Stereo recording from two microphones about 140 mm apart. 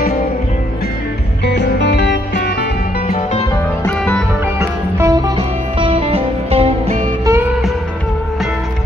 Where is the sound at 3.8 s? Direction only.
10° left (ahead or behind).